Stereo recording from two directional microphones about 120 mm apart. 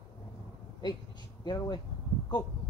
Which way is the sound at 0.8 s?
35° left (ahead or behind).